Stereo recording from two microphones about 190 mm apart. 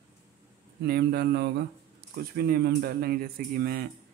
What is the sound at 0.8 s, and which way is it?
Speech, 55° right (ahead or behind).